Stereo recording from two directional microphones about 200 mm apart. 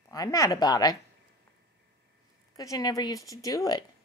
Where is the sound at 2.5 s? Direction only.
15° left (ahead or behind).